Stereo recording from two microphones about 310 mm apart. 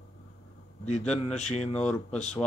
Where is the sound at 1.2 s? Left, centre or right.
Left.